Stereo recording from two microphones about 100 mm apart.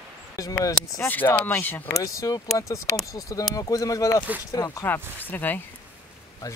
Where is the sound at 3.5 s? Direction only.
35° left (ahead or behind).